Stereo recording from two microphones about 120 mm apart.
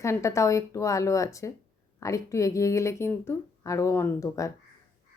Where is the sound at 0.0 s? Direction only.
25° left (ahead or behind).